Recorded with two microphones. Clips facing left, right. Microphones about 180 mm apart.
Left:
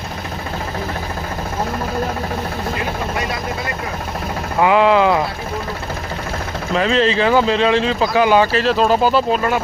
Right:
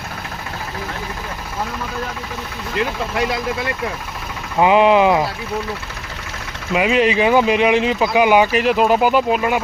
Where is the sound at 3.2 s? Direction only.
85° right.